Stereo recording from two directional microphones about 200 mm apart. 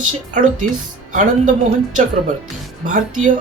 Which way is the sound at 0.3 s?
40° right (ahead or behind).